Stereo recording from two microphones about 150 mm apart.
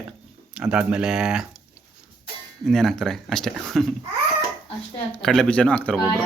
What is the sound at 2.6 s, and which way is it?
Speech, centre (ahead or behind).